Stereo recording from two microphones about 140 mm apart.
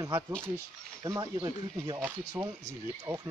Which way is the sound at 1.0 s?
25° right (ahead or behind).